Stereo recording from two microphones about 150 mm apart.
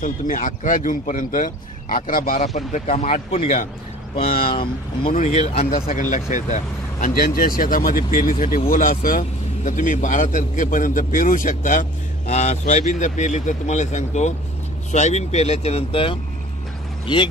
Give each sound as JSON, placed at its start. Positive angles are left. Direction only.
{"t": 0.0, "sound": "a man's voice", "side_deg": 60}
{"t": 2.5, "sound": "speech", "side_deg": 50}
{"t": 5.1, "sound": "speech", "side_deg": 45}
{"t": 5.9, "sound": "speech", "side_deg": 60}
{"t": 9.7, "sound": "a man's voice", "side_deg": 55}